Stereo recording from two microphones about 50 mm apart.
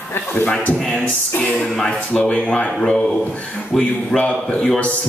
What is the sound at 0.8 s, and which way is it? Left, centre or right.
Speech, centre.